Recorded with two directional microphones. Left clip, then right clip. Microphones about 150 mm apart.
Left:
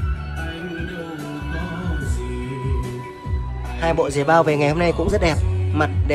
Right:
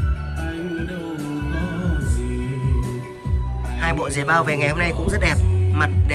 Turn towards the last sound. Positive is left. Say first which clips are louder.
# left 1 dB
turn(degrees=25)  # may be behind; listen again after turning